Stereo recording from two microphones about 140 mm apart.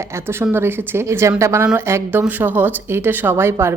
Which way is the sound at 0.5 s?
15° right (ahead or behind).